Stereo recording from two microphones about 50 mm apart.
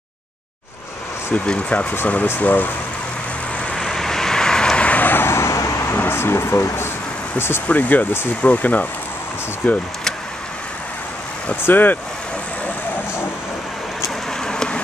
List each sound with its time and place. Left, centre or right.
1.3 s speech: left
2.2 s speech: left
3.7 s vehicle: centre
4.8 s vehicle: left
5.9 s a sound: left
7.3 s speech: left
7.6 s speech: left
11.6 s speech: left
14.4 s vehicle: centre